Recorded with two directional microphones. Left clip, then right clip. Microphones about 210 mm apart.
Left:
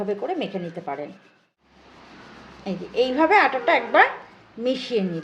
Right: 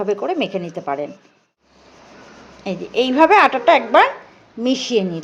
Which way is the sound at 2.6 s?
25° right (ahead or behind).